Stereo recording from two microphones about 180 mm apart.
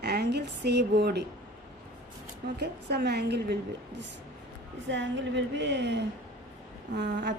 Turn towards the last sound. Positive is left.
turn(degrees=-70)  # may be behind; listen again after turning